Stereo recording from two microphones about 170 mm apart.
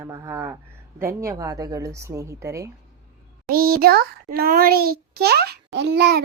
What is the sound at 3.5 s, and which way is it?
A child's voice, 60° right (ahead or behind).